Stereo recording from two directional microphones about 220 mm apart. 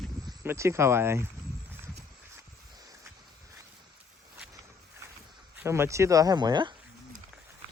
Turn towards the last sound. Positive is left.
turn(degrees=-20)  # may be behind; listen again after turning